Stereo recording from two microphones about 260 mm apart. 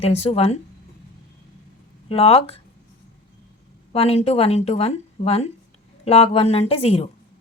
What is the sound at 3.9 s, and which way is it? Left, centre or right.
A woman's voice, left.